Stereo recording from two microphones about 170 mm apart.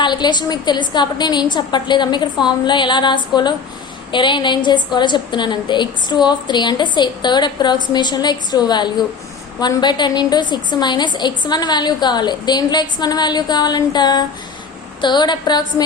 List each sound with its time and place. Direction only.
0.0 s a woman's voice: 25° left (ahead or behind)